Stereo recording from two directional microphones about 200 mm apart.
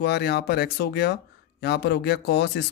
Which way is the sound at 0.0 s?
55° left (ahead or behind).